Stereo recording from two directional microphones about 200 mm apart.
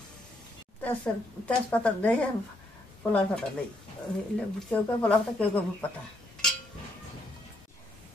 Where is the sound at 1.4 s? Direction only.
5° left (ahead or behind).